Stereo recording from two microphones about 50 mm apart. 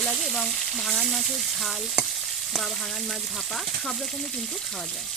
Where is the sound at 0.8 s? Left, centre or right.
Centre.